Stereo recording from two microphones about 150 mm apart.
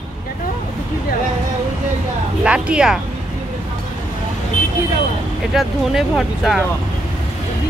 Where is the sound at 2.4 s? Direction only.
5° right (ahead or behind).